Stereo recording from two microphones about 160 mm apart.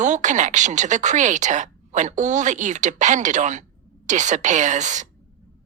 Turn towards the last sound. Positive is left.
turn(degrees=-50)  # may be behind; listen again after turning